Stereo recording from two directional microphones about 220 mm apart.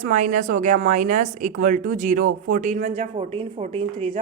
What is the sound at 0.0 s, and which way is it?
Speech, 35° right (ahead or behind).